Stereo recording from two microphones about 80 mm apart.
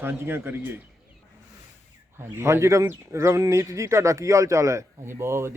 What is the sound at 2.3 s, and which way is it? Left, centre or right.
Speech, right.